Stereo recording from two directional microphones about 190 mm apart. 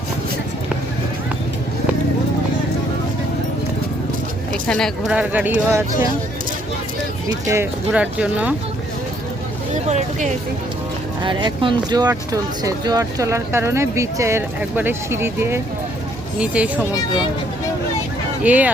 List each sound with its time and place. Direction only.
4.7 s speech: centre (ahead or behind)
7.3 s speech: 15° right (ahead or behind)
11.2 s speech: 25° right (ahead or behind); by 16.8 s 5° right (ahead or behind)
18.4 s speech: 10° right (ahead or behind)